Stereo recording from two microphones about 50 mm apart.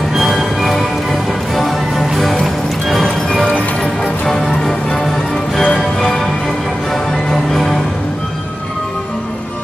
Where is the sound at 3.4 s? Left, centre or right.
Left.